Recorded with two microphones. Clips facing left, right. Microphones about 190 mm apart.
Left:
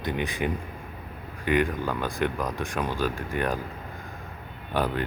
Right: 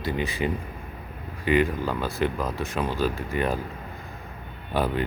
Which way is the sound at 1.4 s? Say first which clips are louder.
Right 2 dB; 55° left (ahead or behind).